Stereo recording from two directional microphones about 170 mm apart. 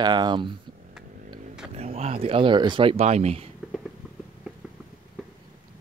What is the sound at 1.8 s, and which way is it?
Speech, 40° right (ahead or behind).